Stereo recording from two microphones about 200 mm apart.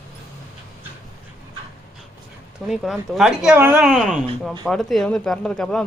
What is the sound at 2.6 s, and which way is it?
Speech, centre (ahead or behind).